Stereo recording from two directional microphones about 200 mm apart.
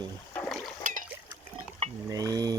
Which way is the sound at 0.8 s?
40° right (ahead or behind).